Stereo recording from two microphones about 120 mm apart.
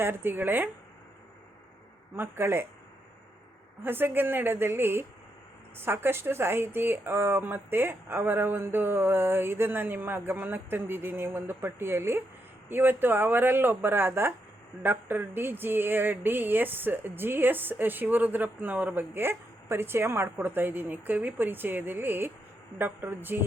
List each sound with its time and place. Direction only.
0.0 s speech: 20° right (ahead or behind)
2.1 s speech: 20° right (ahead or behind)
3.8 s speech: 15° right (ahead or behind)